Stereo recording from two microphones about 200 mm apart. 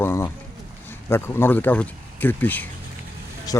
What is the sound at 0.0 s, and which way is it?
Speech, 15° left (ahead or behind).